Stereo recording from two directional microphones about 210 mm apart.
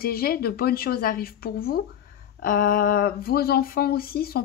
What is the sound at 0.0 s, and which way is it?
Speech, 45° left (ahead or behind).